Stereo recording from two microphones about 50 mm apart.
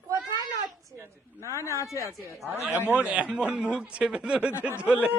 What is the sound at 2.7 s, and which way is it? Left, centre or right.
Speech, right.